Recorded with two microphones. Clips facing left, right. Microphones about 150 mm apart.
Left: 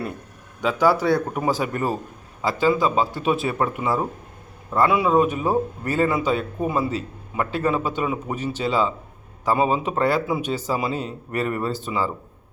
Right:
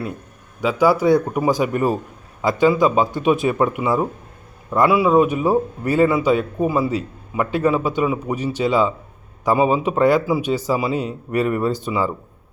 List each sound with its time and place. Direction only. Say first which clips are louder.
0.6 s a man's voice: right 3 dB; 10° right (ahead or behind)